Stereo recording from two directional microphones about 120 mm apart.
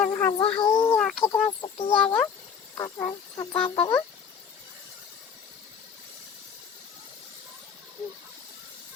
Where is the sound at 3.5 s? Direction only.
45° left (ahead or behind).